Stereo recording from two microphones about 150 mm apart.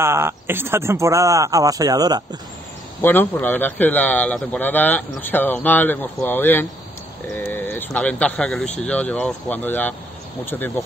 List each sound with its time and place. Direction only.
0.0 s speech: 15° right (ahead or behind)
3.0 s speech: 15° left (ahead or behind)